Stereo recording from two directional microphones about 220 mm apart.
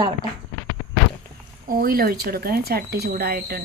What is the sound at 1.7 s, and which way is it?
Speech, 40° right (ahead or behind).